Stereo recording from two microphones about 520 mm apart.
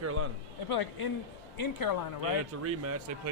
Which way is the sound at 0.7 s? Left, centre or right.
Left.